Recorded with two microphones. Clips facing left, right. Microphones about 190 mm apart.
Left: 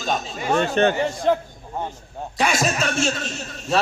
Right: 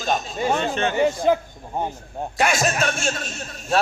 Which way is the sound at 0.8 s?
50° left (ahead or behind).